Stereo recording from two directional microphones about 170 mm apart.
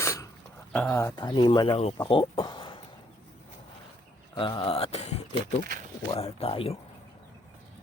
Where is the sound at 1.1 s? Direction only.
30° left (ahead or behind).